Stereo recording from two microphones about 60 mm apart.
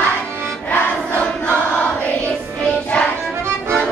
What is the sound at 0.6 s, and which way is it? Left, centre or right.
Choir, left.